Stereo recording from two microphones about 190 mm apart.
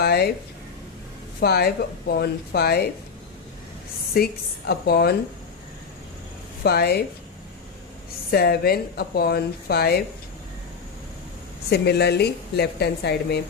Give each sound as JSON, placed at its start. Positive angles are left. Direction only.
{"t": 0.0, "sound": "a sound", "side_deg": 55}
{"t": 1.4, "sound": "speech", "side_deg": 55}
{"t": 4.1, "sound": "speech", "side_deg": 55}
{"t": 6.6, "sound": "speech", "side_deg": 55}
{"t": 8.3, "sound": "speech", "side_deg": 55}
{"t": 11.7, "sound": "speech", "side_deg": 60}